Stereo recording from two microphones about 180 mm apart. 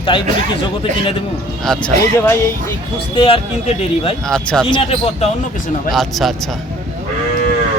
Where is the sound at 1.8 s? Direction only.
15° left (ahead or behind).